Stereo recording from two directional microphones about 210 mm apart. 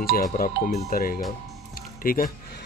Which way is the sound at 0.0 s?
45° left (ahead or behind).